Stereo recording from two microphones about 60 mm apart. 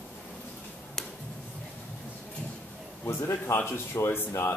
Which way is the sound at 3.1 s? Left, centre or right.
Left.